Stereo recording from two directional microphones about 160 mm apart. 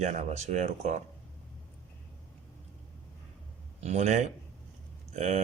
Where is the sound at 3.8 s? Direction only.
45° right (ahead or behind).